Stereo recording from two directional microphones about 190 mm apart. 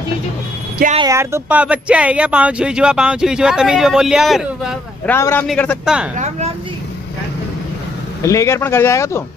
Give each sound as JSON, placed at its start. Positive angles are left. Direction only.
{"t": 0.9, "sound": "speech", "side_deg": -15}
{"t": 5.0, "sound": "speech", "side_deg": 10}
{"t": 6.1, "sound": "speech", "side_deg": -35}
{"t": 8.2, "sound": "speech", "side_deg": 15}